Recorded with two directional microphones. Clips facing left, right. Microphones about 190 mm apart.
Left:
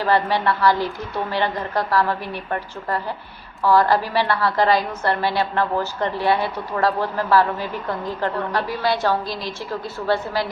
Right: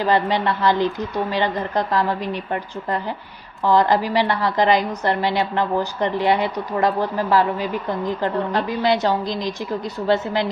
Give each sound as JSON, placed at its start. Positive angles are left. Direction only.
{"t": 0.0, "sound": "a woman's voice", "side_deg": -20}